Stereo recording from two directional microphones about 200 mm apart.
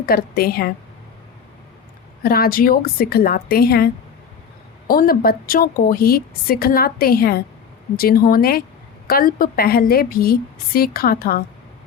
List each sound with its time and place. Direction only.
0.0 s a woman's voice: 50° left (ahead or behind)
2.2 s a woman's voice: 50° left (ahead or behind)
4.9 s a woman's voice: 45° left (ahead or behind)